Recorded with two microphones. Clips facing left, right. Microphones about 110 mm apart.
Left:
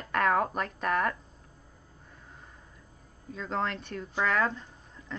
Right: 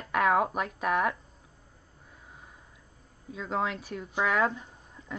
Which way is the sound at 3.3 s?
5° right (ahead or behind).